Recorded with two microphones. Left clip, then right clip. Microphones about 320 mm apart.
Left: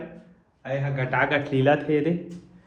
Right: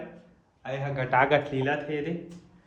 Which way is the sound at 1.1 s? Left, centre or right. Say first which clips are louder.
Right 1 dB; right.